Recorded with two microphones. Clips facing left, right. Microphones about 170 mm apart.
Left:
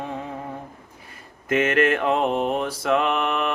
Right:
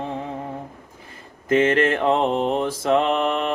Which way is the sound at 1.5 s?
30° right (ahead or behind).